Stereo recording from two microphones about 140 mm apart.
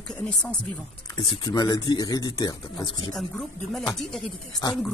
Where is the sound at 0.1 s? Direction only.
5° left (ahead or behind).